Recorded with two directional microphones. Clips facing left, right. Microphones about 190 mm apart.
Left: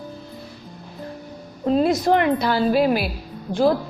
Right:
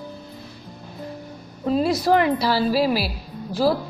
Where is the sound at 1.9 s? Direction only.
Centre (ahead or behind).